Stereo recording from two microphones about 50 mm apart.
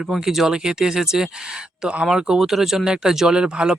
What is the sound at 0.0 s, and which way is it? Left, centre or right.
Speech, centre.